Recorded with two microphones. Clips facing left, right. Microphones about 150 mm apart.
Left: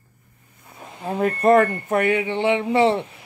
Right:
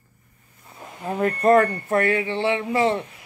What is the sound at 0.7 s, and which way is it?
Speech, 20° left (ahead or behind).